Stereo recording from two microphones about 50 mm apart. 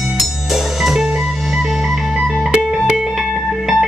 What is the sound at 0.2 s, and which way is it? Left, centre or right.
Music, centre.